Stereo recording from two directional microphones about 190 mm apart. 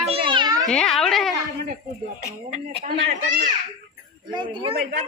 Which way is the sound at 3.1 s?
40° right (ahead or behind).